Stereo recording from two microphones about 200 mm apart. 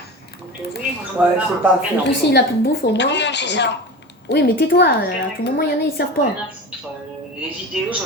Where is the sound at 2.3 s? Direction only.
50° left (ahead or behind).